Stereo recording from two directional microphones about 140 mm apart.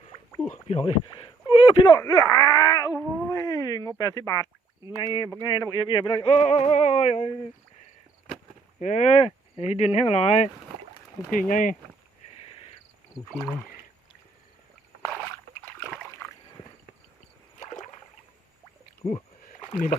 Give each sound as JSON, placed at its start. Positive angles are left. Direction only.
{"t": 0.5, "sound": "speech", "side_deg": 50}
{"t": 1.0, "sound": "a sound", "side_deg": 35}
{"t": 2.0, "sound": "speech", "side_deg": 25}
{"t": 3.0, "sound": "cat", "side_deg": 15}
{"t": 3.4, "sound": "a sound", "side_deg": 25}
{"t": 8.8, "sound": "speech", "side_deg": 60}
{"t": 11.3, "sound": "speech", "side_deg": 75}
{"t": 13.3, "sound": "speech", "side_deg": 5}
{"t": 17.6, "sound": "rowboat", "side_deg": 55}
{"t": 19.5, "sound": "a sound", "side_deg": 30}